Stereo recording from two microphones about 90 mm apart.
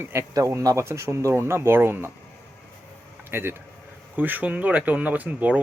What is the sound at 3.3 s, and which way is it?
Speech, 25° right (ahead or behind).